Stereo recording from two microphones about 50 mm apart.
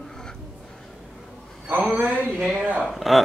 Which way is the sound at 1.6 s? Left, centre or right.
Right.